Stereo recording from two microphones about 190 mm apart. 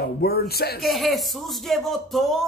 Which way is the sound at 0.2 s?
55° left (ahead or behind).